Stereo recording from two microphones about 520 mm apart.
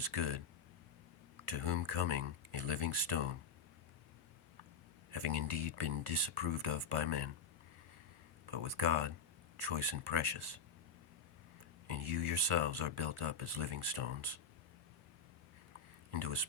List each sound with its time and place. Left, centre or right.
0.0 s speech: right
1.5 s speech: right
5.1 s speech: right
8.4 s speech: right
11.9 s speech: right
16.1 s speech: right